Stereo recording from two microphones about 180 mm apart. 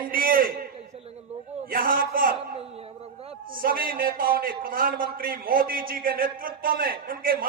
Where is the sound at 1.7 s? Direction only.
50° right (ahead or behind).